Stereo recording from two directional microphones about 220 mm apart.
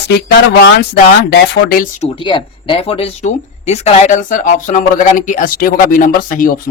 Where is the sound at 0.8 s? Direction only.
45° left (ahead or behind).